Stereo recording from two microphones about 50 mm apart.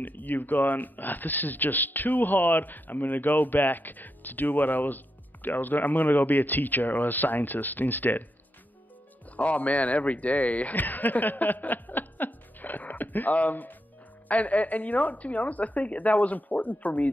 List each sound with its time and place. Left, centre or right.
0.0 s speech: left
9.4 s a man's voice: left